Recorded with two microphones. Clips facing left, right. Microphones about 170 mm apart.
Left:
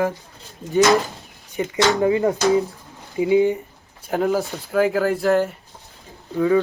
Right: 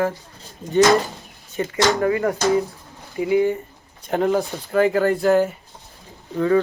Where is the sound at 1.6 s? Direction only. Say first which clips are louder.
Left 1 dB; 10° left (ahead or behind).